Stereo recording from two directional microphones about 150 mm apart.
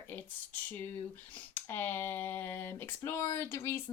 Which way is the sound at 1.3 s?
10° left (ahead or behind).